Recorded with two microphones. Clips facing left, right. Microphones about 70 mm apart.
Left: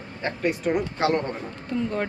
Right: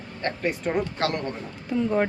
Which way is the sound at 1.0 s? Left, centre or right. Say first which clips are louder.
Left 4 dB; left.